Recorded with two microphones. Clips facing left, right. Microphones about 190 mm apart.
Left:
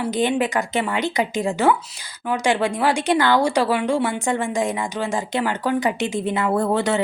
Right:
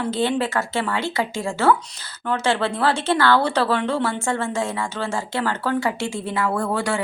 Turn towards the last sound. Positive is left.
turn(degrees=20)  # may be behind; listen again after turning